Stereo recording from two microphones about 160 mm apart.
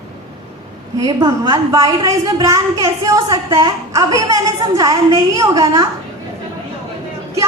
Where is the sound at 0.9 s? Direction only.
25° right (ahead or behind).